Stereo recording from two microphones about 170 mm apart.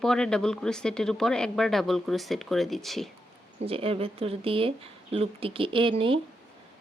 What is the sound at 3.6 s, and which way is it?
Speech, 35° right (ahead or behind).